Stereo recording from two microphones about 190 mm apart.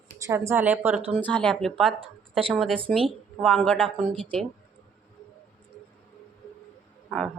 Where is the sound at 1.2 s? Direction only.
5° left (ahead or behind).